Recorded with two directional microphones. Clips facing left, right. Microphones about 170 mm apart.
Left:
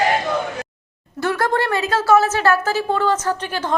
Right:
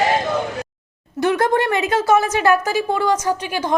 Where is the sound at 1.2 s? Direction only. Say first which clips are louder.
Right 3 dB; 20° right (ahead or behind).